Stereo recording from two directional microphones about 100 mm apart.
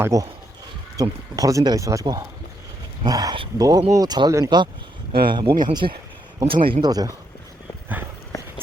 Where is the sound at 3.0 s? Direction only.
40° right (ahead or behind).